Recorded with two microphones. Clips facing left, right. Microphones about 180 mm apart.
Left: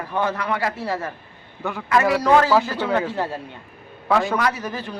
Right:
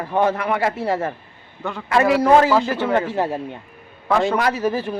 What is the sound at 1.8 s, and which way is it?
A man's voice, 25° right (ahead or behind).